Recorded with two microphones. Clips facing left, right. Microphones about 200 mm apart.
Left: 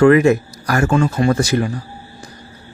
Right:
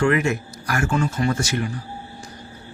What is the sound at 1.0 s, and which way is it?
Speech, 60° left (ahead or behind).